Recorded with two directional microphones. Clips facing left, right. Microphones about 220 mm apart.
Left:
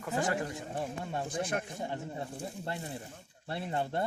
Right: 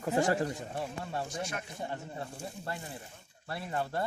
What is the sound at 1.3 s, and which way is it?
Speech, 55° left (ahead or behind).